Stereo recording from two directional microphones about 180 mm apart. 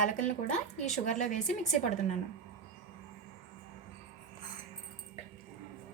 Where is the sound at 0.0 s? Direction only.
45° left (ahead or behind).